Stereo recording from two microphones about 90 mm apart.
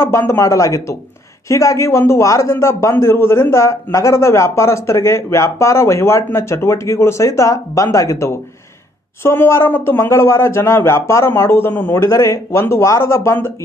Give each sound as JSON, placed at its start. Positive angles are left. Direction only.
{"t": 0.4, "sound": "a man's voice", "side_deg": 35}